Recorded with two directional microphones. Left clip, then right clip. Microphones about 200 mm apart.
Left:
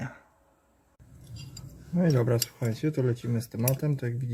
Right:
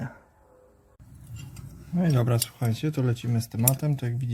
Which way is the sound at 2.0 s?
40° right (ahead or behind).